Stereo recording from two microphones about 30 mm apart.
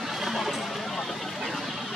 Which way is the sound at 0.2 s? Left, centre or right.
Centre.